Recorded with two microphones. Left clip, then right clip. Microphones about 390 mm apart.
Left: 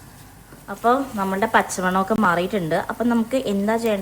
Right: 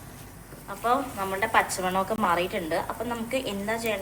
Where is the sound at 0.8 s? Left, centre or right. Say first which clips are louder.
Left 6 dB; left.